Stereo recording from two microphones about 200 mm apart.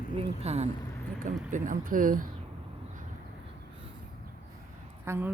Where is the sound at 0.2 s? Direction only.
30° right (ahead or behind).